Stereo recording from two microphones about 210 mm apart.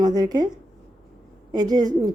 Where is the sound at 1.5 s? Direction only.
20° right (ahead or behind).